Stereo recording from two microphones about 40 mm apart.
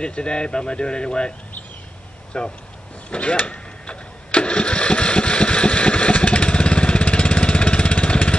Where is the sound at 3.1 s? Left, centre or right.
Left.